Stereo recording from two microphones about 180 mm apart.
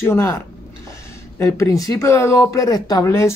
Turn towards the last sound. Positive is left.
turn(degrees=15)  # may be behind; listen again after turning